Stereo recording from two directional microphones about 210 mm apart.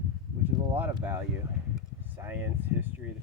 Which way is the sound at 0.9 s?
10° right (ahead or behind).